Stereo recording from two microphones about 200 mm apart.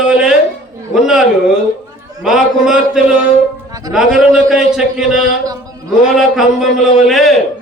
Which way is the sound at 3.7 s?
20° right (ahead or behind).